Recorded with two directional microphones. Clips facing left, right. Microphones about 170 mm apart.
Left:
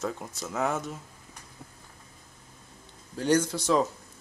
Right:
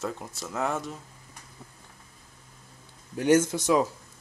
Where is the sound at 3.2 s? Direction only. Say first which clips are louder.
Right 3 dB; 20° right (ahead or behind).